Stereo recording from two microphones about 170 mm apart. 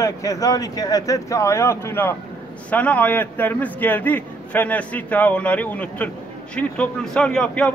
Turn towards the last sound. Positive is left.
turn(degrees=5)  # may be behind; listen again after turning